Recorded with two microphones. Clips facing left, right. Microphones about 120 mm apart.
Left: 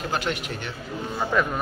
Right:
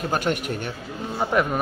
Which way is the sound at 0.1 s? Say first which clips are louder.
Right 4 dB; 50° right (ahead or behind).